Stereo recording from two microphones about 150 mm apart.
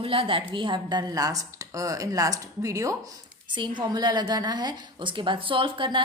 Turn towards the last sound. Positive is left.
turn(degrees=-35)  # may be behind; listen again after turning